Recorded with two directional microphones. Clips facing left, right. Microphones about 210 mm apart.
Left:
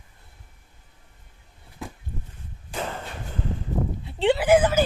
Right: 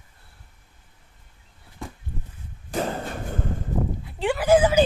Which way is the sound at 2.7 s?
40° right (ahead or behind).